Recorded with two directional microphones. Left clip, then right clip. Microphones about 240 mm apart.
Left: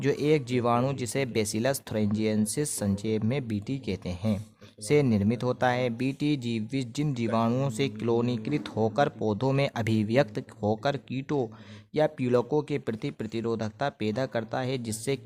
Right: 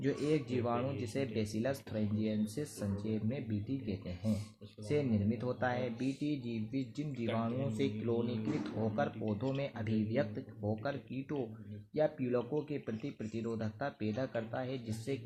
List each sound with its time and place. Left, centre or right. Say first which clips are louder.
0.0 s speech: left 9 dB; left